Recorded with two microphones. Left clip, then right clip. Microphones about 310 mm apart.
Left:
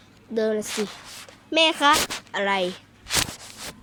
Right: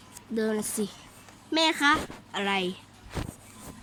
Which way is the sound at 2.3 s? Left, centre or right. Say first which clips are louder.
Left 5 dB; centre.